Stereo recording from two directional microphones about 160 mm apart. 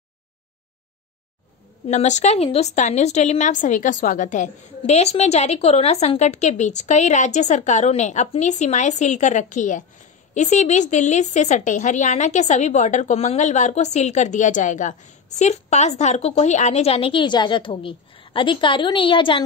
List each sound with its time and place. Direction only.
1.9 s a woman's voice: 45° left (ahead or behind)